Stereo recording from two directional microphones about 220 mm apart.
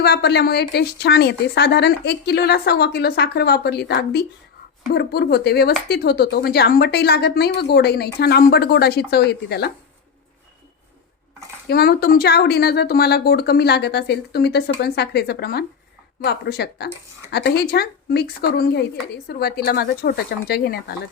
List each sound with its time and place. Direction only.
0.0 s speech: 45° left (ahead or behind)
11.7 s speech: 45° left (ahead or behind)